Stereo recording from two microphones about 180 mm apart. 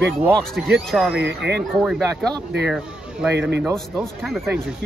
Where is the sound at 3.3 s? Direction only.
70° right (ahead or behind).